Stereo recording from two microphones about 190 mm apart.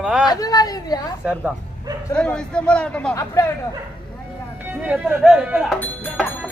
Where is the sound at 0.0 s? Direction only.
5° right (ahead or behind).